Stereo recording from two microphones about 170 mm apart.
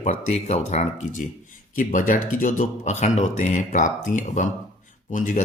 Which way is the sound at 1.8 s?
50° left (ahead or behind).